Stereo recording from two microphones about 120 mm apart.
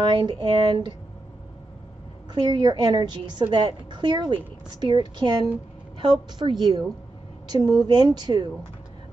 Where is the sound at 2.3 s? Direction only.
35° right (ahead or behind).